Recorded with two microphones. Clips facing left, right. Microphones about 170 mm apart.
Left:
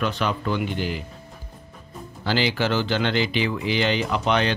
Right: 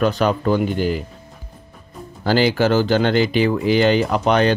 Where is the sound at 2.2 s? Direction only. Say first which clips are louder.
Right 7 dB; 45° right (ahead or behind).